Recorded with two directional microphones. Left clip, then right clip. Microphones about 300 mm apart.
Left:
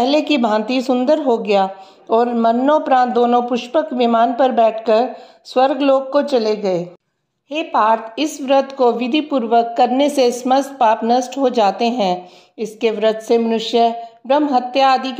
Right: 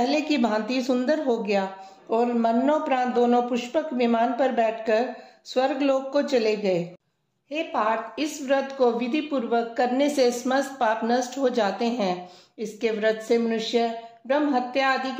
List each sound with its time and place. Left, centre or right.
0.0 s a woman's voice: centre